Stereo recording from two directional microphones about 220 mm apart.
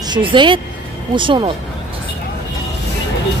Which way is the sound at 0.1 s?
20° right (ahead or behind).